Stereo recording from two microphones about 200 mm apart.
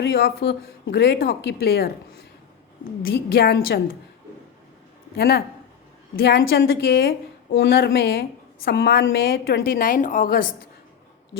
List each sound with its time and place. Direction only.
0.0 s speech: 55° left (ahead or behind)
3.3 s a woman's voice: 50° left (ahead or behind)
5.1 s a woman's voice: 50° left (ahead or behind)